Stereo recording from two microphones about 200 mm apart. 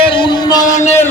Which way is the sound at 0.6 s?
40° left (ahead or behind).